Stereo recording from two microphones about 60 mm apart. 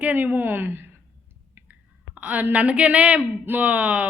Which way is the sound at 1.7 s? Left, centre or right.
Right.